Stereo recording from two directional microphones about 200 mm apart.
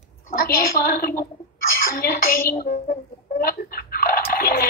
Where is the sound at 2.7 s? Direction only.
40° left (ahead or behind).